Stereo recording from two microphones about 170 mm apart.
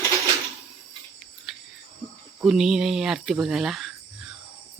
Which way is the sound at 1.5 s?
Centre (ahead or behind).